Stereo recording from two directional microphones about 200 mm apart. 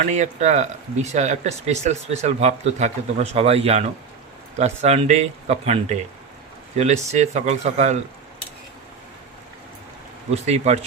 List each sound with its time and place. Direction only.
0.0 s speech: 35° right (ahead or behind)
10.3 s speech: 35° right (ahead or behind)